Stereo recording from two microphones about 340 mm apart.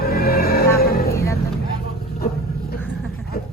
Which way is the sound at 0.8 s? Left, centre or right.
Left.